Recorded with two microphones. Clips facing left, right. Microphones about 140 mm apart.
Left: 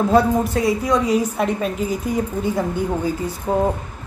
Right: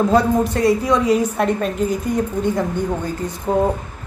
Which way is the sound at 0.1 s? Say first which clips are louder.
Even; centre (ahead or behind).